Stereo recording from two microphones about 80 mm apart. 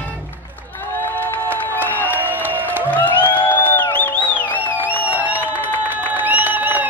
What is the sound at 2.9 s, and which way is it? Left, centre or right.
Music, left.